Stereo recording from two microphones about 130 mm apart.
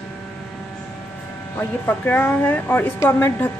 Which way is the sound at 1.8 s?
15° left (ahead or behind).